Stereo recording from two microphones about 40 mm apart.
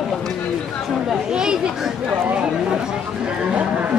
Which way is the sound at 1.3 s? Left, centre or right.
Centre.